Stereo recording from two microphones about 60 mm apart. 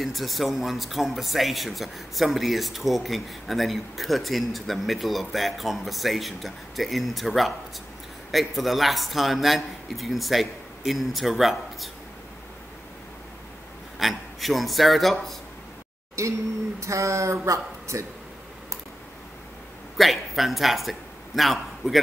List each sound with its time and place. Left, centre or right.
0.0 s speech: centre
13.9 s a man's voice: centre
16.2 s speech: right
20.0 s speech: centre